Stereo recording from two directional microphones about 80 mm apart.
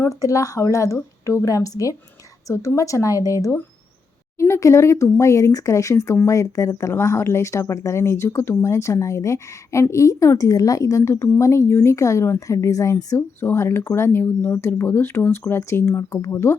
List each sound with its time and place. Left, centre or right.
0.0 s a woman's voice: left
4.4 s speech: left
13.1 s speech: left